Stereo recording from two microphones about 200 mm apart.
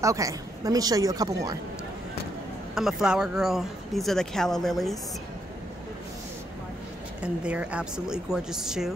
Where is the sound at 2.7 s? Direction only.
Centre (ahead or behind).